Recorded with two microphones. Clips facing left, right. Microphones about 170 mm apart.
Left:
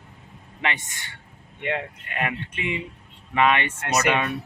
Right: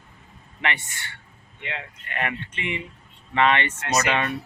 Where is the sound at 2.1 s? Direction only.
15° left (ahead or behind).